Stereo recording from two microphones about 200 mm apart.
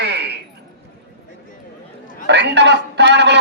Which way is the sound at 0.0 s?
60° right (ahead or behind).